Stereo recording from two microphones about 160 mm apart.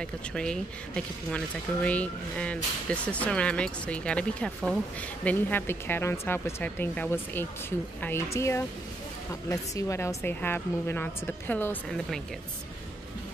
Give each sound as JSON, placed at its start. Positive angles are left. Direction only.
{"t": 0.0, "sound": "speech", "side_deg": 5}